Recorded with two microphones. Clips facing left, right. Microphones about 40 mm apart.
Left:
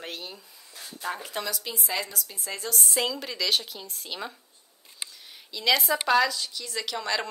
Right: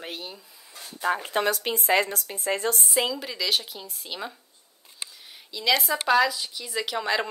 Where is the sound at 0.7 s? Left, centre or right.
Right.